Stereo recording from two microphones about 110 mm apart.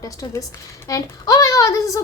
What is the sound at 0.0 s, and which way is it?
A child's voice, 35° left (ahead or behind).